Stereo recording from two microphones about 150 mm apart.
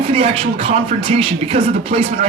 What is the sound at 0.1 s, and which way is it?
Speech, 40° right (ahead or behind).